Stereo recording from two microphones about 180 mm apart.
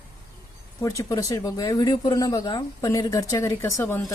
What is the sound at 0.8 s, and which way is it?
Speech, 20° left (ahead or behind).